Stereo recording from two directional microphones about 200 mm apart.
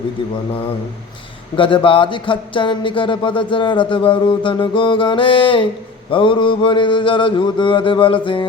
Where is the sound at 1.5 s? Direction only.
25° left (ahead or behind).